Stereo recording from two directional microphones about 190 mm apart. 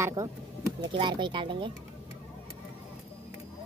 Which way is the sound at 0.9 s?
25° right (ahead or behind).